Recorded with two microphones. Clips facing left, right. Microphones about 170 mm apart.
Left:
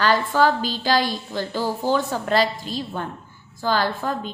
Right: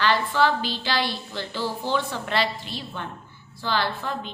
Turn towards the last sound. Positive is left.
turn(degrees=45)  # may be behind; listen again after turning